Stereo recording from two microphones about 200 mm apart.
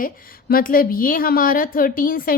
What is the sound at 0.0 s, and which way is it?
A woman's voice, 45° left (ahead or behind).